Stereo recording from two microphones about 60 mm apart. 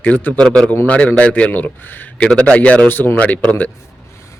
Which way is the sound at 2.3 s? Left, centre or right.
Left.